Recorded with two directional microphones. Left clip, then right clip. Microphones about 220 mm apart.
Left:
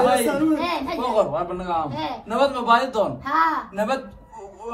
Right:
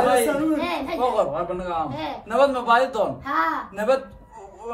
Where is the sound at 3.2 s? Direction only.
Centre (ahead or behind).